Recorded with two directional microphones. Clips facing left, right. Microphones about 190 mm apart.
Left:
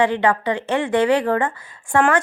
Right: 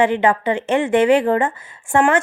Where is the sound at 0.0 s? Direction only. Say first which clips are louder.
Right 2 dB; 20° right (ahead or behind).